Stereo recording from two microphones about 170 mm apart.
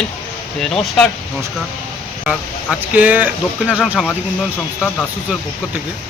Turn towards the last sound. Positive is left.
turn(degrees=0)  # may be behind; listen again after turning